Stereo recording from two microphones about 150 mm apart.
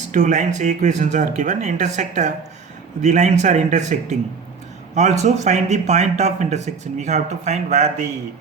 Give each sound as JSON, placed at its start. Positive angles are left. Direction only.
{"t": 0.1, "sound": "a man's voice", "side_deg": -55}
{"t": 4.9, "sound": "a man's voice", "side_deg": -50}